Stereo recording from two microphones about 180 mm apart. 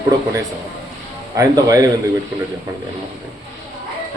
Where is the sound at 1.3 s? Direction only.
20° right (ahead or behind).